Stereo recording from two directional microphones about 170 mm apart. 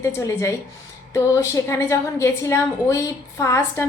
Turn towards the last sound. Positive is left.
turn(degrees=15)  # may be behind; listen again after turning